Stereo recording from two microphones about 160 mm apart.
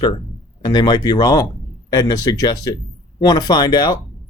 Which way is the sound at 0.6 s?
25° left (ahead or behind).